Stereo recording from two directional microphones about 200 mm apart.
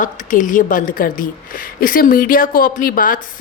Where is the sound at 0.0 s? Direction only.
40° left (ahead or behind).